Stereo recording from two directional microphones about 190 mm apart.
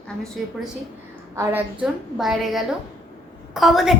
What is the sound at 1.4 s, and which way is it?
Speech, 10° right (ahead or behind).